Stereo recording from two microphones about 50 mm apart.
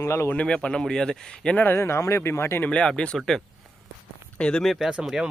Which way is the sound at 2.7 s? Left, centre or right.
Left.